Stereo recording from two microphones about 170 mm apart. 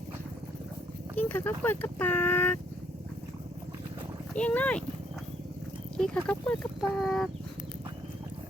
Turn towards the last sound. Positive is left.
turn(degrees=0)  # may be behind; listen again after turning